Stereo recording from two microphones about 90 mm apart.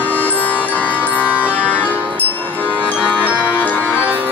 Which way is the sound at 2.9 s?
15° right (ahead or behind).